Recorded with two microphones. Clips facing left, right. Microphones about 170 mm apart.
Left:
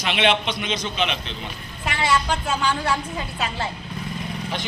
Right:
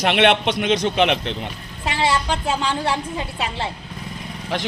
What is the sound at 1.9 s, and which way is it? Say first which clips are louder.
A woman's voice: right 2 dB; 30° right (ahead or behind).